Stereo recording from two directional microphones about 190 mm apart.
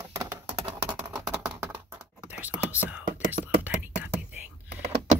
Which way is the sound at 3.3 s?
10° right (ahead or behind).